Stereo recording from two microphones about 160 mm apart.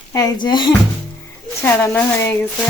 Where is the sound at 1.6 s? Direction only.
15° left (ahead or behind).